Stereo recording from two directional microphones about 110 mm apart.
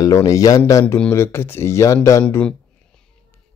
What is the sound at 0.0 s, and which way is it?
Speech, 30° left (ahead or behind).